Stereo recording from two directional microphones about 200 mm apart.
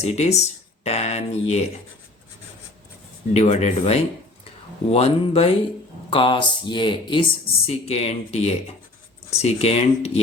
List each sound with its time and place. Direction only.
0.0 s speech: 35° left (ahead or behind)
3.3 s speech: 30° left (ahead or behind)